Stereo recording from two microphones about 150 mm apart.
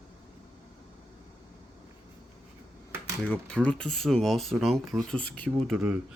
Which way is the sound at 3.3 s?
10° left (ahead or behind).